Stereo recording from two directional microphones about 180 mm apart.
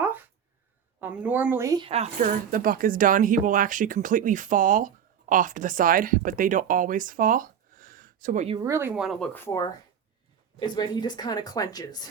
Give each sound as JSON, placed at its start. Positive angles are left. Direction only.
{"t": 0.0, "sound": "a sound", "side_deg": -10}
{"t": 1.0, "sound": "a woman's voice", "side_deg": -10}
{"t": 1.9, "sound": "speech", "side_deg": -40}
{"t": 8.4, "sound": "a woman's voice", "side_deg": -20}
{"t": 9.0, "sound": "speech", "side_deg": 0}
{"t": 9.3, "sound": "speech", "side_deg": 15}